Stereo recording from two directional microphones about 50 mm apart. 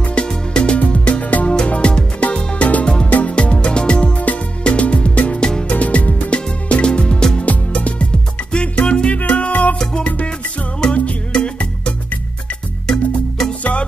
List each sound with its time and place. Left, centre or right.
0.0 s music: left
5.4 s music: centre
5.7 s music: left
10.8 s music: centre